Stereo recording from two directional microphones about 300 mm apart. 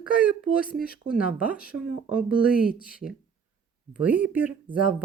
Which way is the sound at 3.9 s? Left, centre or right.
Centre.